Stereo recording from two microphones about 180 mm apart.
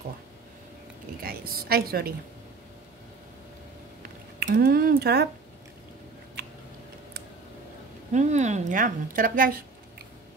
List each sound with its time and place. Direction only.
1.2 s a woman's voice: 55° right (ahead or behind)
4.0 s a sound: 60° right (ahead or behind)
8.1 s speech: 40° right (ahead or behind)